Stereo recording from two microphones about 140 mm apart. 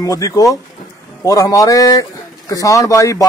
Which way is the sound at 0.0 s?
25° left (ahead or behind).